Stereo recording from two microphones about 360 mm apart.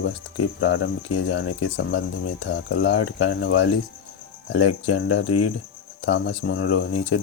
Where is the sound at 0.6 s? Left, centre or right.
Left.